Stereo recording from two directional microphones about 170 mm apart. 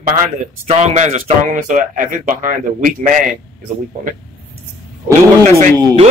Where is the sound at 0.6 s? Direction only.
40° right (ahead or behind).